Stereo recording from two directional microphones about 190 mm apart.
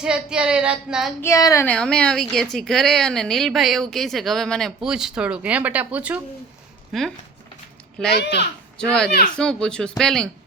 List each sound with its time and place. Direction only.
0.0 s a woman's voice: 5° right (ahead or behind)
1.2 s speech: 15° left (ahead or behind)
1.6 s a woman's voice: 5° left (ahead or behind)
8.2 s speech: 60° left (ahead or behind)
9.3 s a woman's voice: 5° left (ahead or behind)